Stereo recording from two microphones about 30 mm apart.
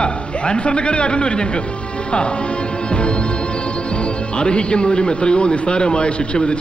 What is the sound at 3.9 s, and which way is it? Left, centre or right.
Speech, left.